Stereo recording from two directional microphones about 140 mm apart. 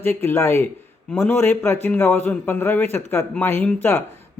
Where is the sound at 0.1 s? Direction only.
15° left (ahead or behind).